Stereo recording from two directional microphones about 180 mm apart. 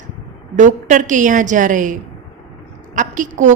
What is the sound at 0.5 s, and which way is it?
A woman's voice, 45° right (ahead or behind).